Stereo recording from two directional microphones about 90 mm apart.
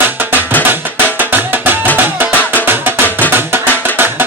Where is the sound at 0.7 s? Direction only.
20° right (ahead or behind).